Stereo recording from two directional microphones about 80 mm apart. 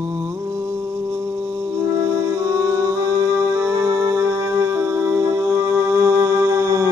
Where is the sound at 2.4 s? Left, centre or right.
Right.